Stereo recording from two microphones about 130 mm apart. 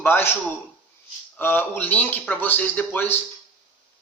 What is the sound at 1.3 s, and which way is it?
A man's voice, 15° left (ahead or behind).